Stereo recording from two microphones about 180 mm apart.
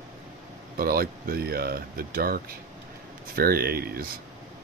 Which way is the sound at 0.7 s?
55° right (ahead or behind).